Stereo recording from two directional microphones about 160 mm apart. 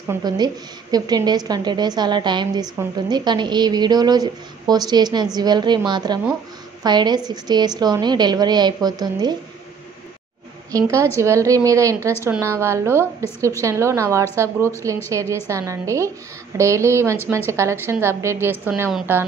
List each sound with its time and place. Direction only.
0.1 s a woman's voice: 25° right (ahead or behind)
10.7 s a woman's voice: 20° right (ahead or behind)